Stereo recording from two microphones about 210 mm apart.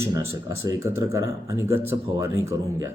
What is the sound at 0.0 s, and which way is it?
Speech, 15° right (ahead or behind).